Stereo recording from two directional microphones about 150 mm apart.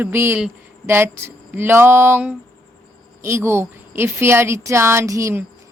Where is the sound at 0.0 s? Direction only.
15° right (ahead or behind).